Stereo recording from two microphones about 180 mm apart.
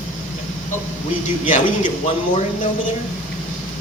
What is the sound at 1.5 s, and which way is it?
Speech, 45° left (ahead or behind).